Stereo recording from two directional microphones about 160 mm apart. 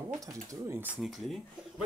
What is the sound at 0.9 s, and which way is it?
Speech, centre (ahead or behind).